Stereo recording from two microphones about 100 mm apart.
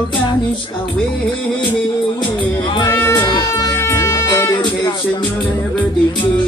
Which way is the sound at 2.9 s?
25° left (ahead or behind).